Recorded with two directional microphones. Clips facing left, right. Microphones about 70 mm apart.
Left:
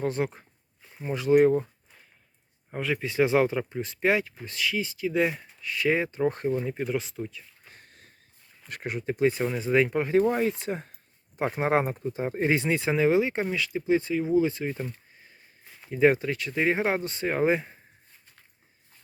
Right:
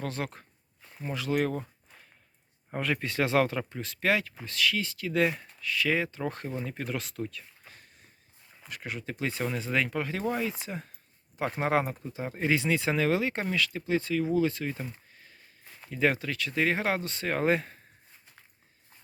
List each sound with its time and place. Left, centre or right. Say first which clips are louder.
0.0 s speech: left 7 dB; left
2.7 s speech: left 3 dB; centre
5.5 s speech: left 4 dB; left
6.7 s speech: left 6 dB; centre
8.8 s speech: left 9 dB; left
11.4 s speech: left 3 dB; centre
11.7 s speech: left 3 dB; left
15.9 s speech: left 6 dB; left
17.3 s speech: left 2 dB; centre